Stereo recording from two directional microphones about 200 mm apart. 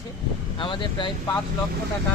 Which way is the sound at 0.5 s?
25° left (ahead or behind).